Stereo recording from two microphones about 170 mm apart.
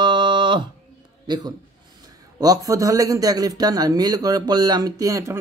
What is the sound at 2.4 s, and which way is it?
A man's voice, 20° right (ahead or behind).